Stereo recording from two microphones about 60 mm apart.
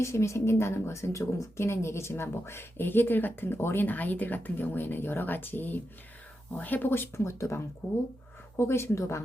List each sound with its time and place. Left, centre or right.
0.0 s speech: left